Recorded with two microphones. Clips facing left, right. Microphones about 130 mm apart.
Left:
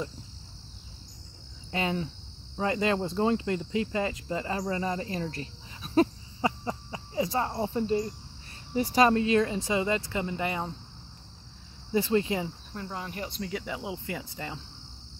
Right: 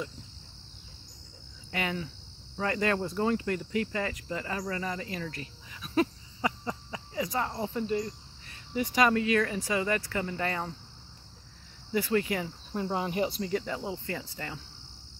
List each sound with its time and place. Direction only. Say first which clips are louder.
1.7 s speech: left 3 dB; 25° left (ahead or behind)
2.5 s cricket: left 2 dB; 20° left (ahead or behind)
8.7 s speech: left 3 dB; 35° left (ahead or behind); by 10.7 s 15° left (ahead or behind)
11.9 s speech: left 2 dB; 25° left (ahead or behind)
12.7 s cricket: right 9 dB; 20° right (ahead or behind)
13.3 s cricket: right 3 dB; centre (ahead or behind); by 14.6 s 20° left (ahead or behind)